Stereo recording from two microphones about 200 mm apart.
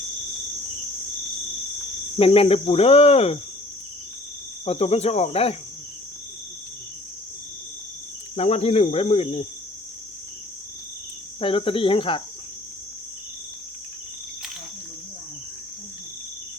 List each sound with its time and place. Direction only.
2.1 s cricket: 30° left (ahead or behind)
4.6 s speech: 30° left (ahead or behind)
8.4 s speech: 30° left (ahead or behind)
11.3 s cricket: 25° left (ahead or behind)